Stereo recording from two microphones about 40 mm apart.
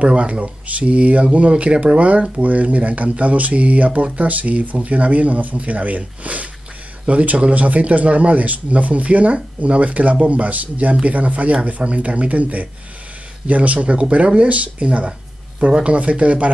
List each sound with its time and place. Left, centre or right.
0.0 s speech: right